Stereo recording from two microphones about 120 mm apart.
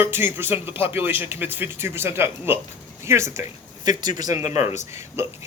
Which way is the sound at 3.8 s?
35° right (ahead or behind).